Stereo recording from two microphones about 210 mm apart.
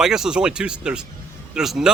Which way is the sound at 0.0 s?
5° right (ahead or behind).